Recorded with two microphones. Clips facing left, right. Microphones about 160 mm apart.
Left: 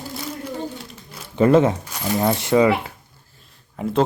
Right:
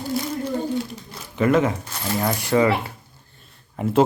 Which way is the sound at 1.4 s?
30° left (ahead or behind).